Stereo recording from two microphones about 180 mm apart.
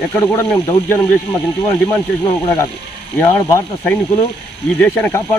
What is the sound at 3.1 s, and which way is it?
Speech, 10° left (ahead or behind).